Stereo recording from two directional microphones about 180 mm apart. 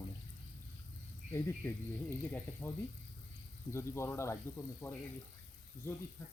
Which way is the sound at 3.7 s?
15° left (ahead or behind).